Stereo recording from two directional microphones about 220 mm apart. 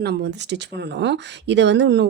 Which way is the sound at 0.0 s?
50° right (ahead or behind).